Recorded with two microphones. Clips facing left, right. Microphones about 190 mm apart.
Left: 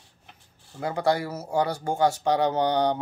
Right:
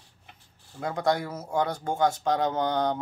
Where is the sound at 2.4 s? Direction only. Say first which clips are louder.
Left 3 dB; 70° left (ahead or behind).